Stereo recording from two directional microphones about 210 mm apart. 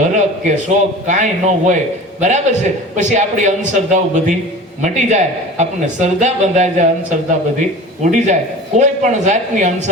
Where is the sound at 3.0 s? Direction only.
35° right (ahead or behind).